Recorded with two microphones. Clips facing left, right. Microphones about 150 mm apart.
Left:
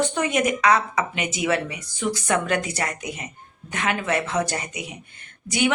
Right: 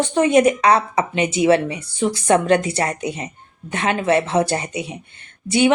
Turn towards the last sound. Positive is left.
turn(degrees=-30)  # may be behind; listen again after turning